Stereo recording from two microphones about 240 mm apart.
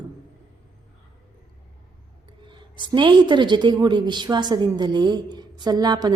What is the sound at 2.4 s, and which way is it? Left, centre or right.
A woman's voice, centre.